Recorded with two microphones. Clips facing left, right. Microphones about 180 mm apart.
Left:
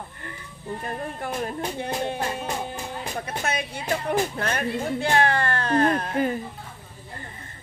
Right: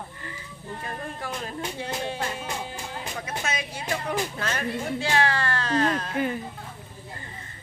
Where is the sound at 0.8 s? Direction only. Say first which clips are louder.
Left 3 dB; 50° left (ahead or behind).